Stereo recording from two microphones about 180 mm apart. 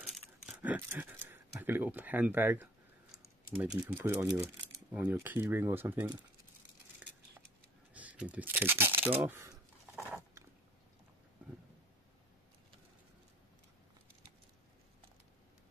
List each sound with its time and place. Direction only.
0.0 s speech: centre (ahead or behind)
7.0 s a sound: 5° right (ahead or behind)
7.9 s speech: 10° right (ahead or behind)